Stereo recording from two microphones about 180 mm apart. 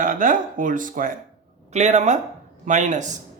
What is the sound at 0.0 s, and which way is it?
Speech, 50° right (ahead or behind).